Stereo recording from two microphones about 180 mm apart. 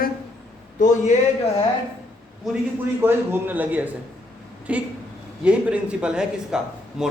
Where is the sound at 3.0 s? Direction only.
10° right (ahead or behind).